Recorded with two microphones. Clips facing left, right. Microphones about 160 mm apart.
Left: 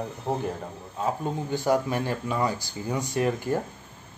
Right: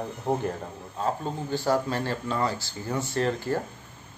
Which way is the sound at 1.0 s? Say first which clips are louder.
Left 1 dB; 15° left (ahead or behind).